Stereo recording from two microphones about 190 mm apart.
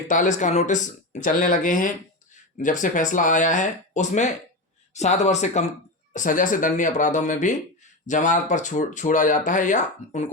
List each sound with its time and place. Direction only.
0.1 s speech: 40° left (ahead or behind)